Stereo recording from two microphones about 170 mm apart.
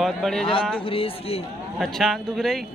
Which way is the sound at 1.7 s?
Centre (ahead or behind).